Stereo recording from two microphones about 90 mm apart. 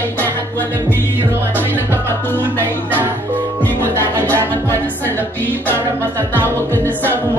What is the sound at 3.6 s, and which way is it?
Music, 20° left (ahead or behind).